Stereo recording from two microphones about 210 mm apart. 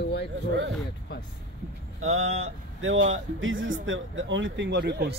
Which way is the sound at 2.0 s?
30° right (ahead or behind).